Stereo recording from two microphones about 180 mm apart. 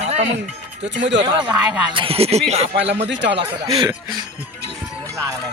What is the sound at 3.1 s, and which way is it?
Speech, 80° right.